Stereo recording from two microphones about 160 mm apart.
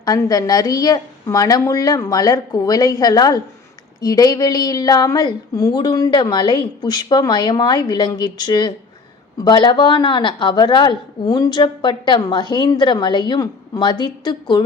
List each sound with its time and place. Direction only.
0.0 s a woman's voice: 25° left (ahead or behind)